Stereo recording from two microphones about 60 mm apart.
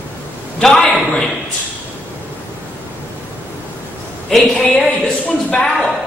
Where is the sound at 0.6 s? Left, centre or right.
Centre.